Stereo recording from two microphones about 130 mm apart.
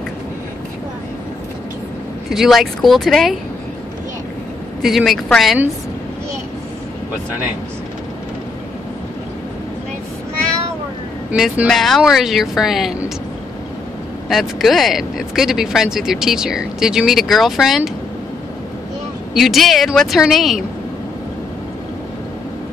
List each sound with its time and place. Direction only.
2.2 s speech: centre (ahead or behind)
4.8 s speech: centre (ahead or behind)
11.7 s speech: centre (ahead or behind)
14.3 s speech: centre (ahead or behind)
19.3 s speech: centre (ahead or behind)